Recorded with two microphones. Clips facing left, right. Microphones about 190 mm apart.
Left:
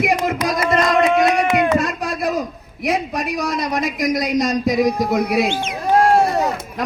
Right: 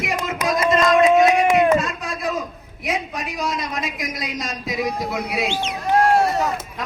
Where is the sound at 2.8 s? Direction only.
35° left (ahead or behind).